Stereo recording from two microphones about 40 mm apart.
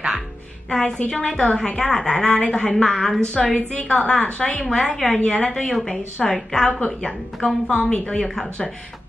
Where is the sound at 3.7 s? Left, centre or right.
Left.